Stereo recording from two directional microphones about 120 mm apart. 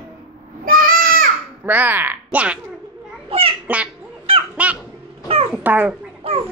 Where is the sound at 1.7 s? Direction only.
15° right (ahead or behind).